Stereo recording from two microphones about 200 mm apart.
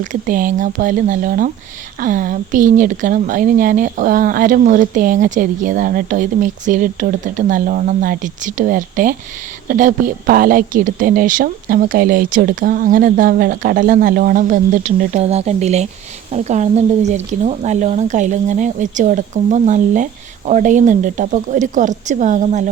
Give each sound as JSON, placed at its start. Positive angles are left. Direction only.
{"t": 0.0, "sound": "speech", "side_deg": -40}